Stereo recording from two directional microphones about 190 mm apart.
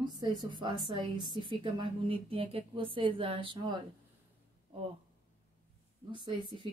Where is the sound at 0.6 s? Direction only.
25° right (ahead or behind).